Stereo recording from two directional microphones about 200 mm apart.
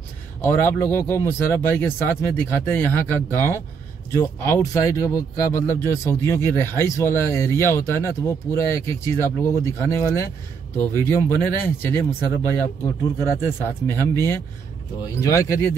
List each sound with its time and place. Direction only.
0.4 s speech: 10° left (ahead or behind)